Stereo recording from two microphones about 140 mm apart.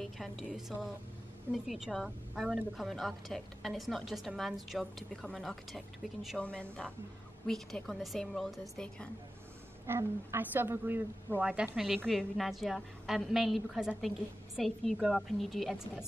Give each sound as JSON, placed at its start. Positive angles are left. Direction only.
{"t": 0.0, "sound": "a woman's voice", "side_deg": 0}
{"t": 9.8, "sound": "a woman's voice", "side_deg": -15}